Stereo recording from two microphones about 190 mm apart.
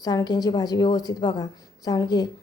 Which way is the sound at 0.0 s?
20° left (ahead or behind).